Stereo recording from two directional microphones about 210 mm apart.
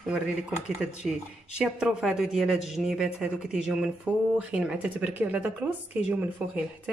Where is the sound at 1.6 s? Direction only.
5° right (ahead or behind).